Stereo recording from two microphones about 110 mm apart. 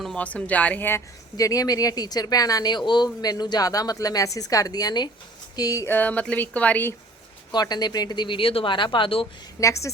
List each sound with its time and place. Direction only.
0.2 s speech: 15° left (ahead or behind)
1.4 s speech: 35° left (ahead or behind)
5.9 s speech: 15° left (ahead or behind)
7.5 s speech: 40° left (ahead or behind)
9.6 s a woman's voice: 25° left (ahead or behind)